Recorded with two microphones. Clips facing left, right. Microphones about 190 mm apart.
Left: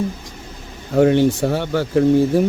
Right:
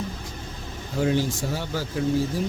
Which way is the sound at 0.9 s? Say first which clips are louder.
Left 10 dB; 65° left (ahead or behind).